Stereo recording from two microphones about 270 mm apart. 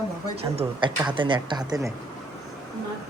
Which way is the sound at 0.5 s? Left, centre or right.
Centre.